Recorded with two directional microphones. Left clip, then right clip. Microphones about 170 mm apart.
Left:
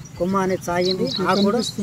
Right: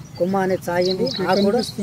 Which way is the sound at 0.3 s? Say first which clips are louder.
Left 1 dB; 30° left (ahead or behind).